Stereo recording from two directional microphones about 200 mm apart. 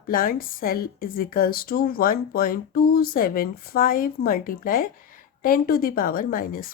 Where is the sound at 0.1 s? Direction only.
45° left (ahead or behind).